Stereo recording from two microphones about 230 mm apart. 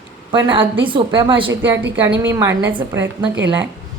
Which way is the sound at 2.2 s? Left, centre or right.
Centre.